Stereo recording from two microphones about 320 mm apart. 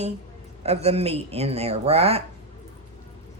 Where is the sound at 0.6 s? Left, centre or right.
Centre.